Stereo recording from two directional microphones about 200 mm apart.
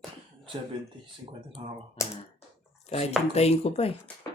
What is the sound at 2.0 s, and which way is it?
Speech, 15° left (ahead or behind).